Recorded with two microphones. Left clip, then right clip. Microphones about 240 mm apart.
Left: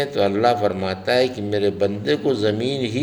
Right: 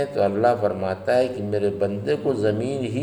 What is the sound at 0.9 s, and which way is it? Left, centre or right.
Speech, left.